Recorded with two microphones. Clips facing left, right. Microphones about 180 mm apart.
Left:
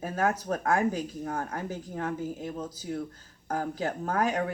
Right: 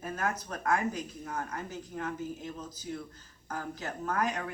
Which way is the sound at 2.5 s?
45° left (ahead or behind).